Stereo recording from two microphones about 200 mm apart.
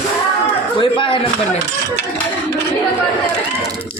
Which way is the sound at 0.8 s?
25° left (ahead or behind).